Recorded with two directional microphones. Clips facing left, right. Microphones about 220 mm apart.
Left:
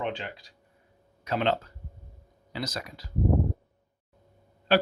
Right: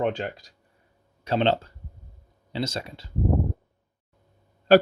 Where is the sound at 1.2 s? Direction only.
30° right (ahead or behind).